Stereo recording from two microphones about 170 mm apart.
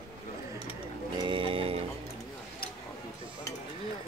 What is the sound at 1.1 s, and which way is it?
Music, 30° right (ahead or behind).